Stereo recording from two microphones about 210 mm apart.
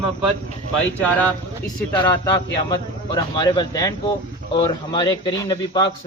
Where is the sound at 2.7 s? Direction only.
20° left (ahead or behind).